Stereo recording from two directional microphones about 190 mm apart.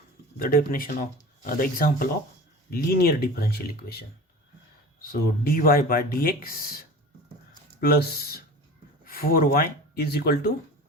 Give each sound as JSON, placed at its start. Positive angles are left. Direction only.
{"t": 0.3, "sound": "speech", "side_deg": 50}
{"t": 5.4, "sound": "speech", "side_deg": 50}
{"t": 7.8, "sound": "speech", "side_deg": 55}